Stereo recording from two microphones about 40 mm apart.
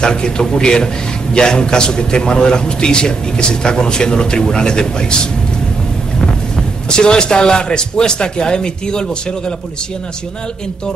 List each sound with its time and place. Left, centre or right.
0.0 s a man's voice: left
6.5 s a man's voice: left